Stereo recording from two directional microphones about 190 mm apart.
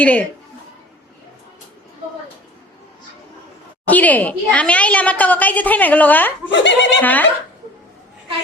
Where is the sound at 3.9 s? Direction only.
10° left (ahead or behind).